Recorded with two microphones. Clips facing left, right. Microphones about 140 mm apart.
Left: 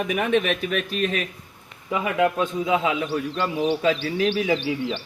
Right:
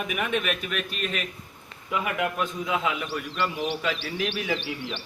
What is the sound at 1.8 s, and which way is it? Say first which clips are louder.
A man's voice: left 6 dB; 25° left (ahead or behind).